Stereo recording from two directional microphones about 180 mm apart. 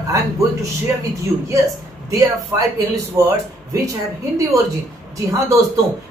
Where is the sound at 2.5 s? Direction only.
20° right (ahead or behind).